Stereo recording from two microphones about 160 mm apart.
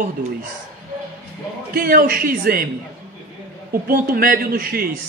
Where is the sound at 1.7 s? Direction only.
65° right (ahead or behind).